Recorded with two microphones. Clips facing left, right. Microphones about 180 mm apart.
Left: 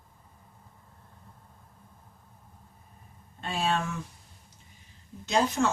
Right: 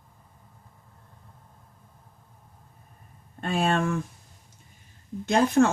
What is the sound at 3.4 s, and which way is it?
Speech, 55° right (ahead or behind).